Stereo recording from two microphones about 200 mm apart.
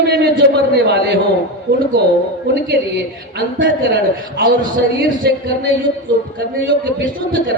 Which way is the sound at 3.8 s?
50° right (ahead or behind).